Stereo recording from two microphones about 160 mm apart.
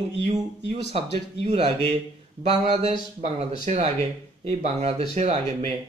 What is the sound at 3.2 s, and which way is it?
Speech, 40° right (ahead or behind).